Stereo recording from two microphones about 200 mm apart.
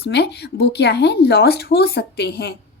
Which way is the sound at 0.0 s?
55° left (ahead or behind).